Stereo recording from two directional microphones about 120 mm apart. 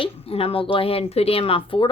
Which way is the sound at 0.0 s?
50° left (ahead or behind).